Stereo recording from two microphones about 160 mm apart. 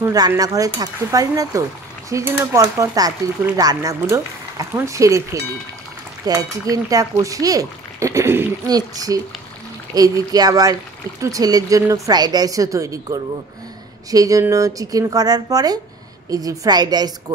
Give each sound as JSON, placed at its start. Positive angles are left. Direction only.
{"t": 0.0, "sound": "speech", "side_deg": -25}